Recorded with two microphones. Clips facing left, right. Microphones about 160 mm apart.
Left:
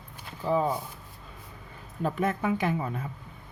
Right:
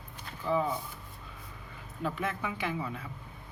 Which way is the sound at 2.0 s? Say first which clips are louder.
Left 6 dB; 45° left (ahead or behind).